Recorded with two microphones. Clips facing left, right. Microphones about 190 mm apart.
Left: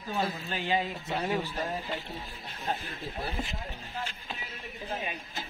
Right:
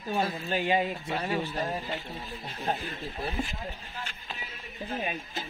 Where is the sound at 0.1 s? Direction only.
20° right (ahead or behind).